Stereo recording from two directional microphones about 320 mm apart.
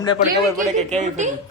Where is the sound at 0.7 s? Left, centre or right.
Right.